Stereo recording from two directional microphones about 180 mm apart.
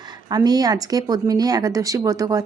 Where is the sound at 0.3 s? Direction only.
20° right (ahead or behind).